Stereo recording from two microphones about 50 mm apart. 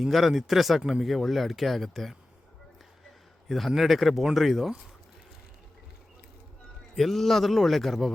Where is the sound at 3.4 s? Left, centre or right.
Centre.